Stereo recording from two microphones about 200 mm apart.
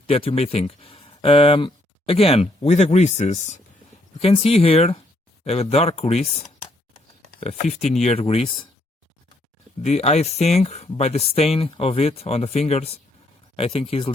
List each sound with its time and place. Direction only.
0.1 s speech: 30° left (ahead or behind)
7.3 s speech: 30° left (ahead or behind)
9.8 s speech: 35° left (ahead or behind)